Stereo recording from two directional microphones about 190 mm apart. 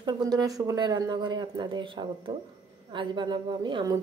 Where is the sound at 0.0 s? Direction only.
20° right (ahead or behind).